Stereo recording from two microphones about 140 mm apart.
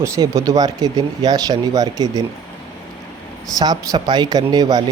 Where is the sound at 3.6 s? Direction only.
30° right (ahead or behind).